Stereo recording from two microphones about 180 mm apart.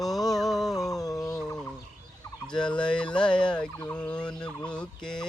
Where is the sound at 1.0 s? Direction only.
20° left (ahead or behind).